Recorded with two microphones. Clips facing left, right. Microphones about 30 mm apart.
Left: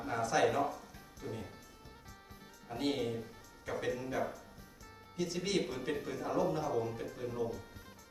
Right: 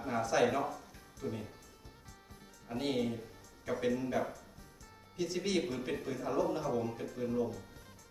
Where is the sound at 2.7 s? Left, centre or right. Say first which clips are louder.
Right 1 dB; centre.